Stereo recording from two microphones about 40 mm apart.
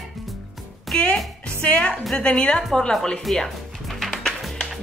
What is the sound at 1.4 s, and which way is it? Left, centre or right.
Speech, left.